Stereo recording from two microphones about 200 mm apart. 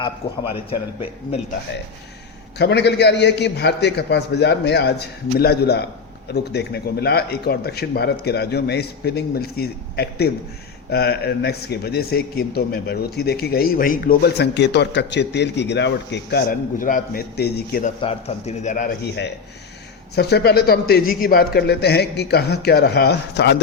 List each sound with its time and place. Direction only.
2.6 s a man's voice: 60° left (ahead or behind)
18.0 s speech: 30° left (ahead or behind)
20.1 s speech: 55° left (ahead or behind)